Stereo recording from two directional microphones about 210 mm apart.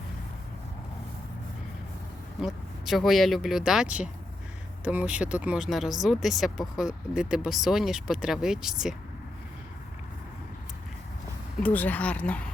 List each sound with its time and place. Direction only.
2.4 s speech: centre (ahead or behind)
11.6 s speech: 5° left (ahead or behind)